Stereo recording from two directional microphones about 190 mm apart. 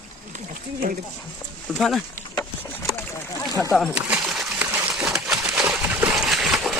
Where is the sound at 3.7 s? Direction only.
5° right (ahead or behind).